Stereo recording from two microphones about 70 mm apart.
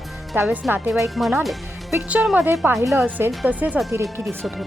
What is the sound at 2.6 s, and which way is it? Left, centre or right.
A woman's voice, right.